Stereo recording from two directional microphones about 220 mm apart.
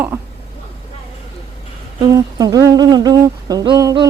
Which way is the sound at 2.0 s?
15° right (ahead or behind).